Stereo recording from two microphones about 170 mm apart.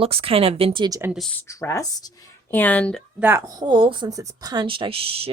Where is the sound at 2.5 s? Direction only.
10° left (ahead or behind).